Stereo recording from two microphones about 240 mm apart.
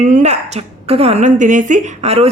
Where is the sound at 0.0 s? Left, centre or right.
Right.